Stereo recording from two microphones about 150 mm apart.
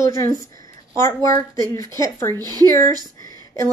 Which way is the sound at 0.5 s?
20° left (ahead or behind).